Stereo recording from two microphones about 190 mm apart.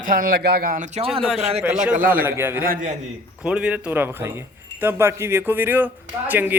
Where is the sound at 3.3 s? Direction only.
5° right (ahead or behind).